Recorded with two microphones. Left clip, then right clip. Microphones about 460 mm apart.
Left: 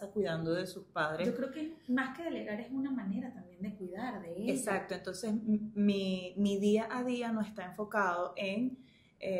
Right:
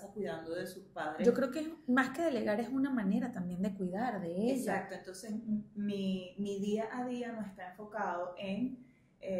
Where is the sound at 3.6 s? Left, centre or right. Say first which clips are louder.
Right 4 dB; right.